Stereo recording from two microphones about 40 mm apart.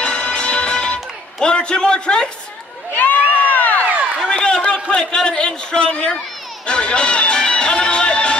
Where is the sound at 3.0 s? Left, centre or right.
Left.